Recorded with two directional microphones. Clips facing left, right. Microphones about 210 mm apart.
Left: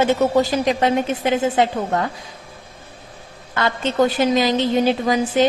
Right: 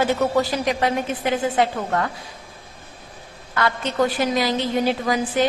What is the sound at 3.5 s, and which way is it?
A woman's voice, 25° left (ahead or behind).